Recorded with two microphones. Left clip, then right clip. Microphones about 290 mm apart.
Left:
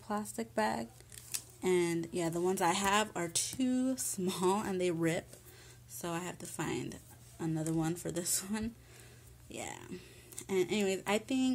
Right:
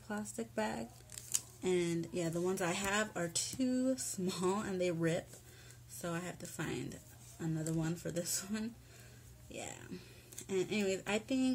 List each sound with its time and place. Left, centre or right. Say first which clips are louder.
0.1 s speech: left 5 dB; centre